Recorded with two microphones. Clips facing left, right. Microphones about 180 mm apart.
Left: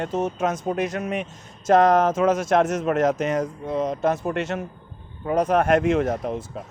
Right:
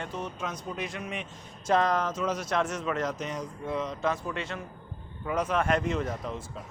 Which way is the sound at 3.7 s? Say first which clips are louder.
Left 7 dB; 45° left (ahead or behind).